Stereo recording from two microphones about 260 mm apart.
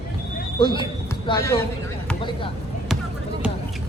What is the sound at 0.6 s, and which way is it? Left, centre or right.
Speech, centre.